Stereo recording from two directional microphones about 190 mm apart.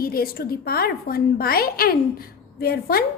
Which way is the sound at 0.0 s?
50° left (ahead or behind).